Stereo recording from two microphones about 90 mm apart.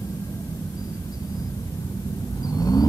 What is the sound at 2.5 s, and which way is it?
Vehicle, 45° left (ahead or behind).